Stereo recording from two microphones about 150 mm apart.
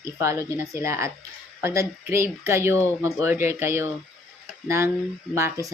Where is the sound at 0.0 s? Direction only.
20° right (ahead or behind).